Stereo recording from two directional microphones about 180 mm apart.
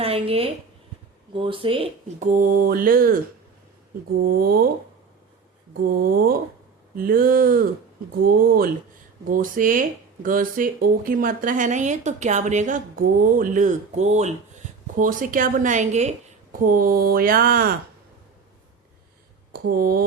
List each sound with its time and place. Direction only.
0.0 s speech: 30° right (ahead or behind)
2.1 s speech: 45° right (ahead or behind)
4.2 s speech: 55° right (ahead or behind)
5.8 s speech: 55° right (ahead or behind)
19.5 s speech: 55° right (ahead or behind)